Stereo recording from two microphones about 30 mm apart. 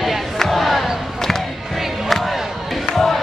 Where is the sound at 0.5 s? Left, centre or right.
Centre.